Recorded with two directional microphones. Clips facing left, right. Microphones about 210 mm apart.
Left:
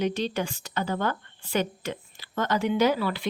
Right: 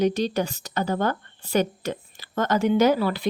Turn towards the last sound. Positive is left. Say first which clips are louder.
# right 4 dB
turn(degrees=-40)  # may be behind; listen again after turning